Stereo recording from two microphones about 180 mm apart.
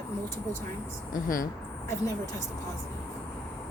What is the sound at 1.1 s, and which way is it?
Speech, 50° left (ahead or behind).